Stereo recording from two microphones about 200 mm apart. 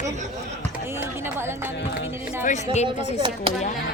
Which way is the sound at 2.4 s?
35° left (ahead or behind).